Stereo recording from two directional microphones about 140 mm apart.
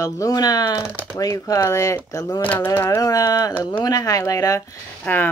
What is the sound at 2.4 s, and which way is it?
Speech, 15° left (ahead or behind).